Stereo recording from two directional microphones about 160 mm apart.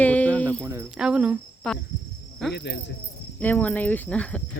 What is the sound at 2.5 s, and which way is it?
Speech, 90° left.